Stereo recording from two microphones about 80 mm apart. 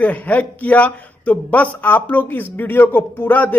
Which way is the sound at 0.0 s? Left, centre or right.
Centre.